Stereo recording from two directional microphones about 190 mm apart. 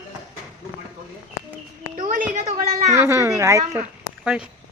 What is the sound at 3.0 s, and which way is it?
Speech, 15° right (ahead or behind).